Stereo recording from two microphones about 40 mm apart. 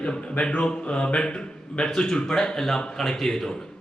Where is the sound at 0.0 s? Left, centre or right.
Left.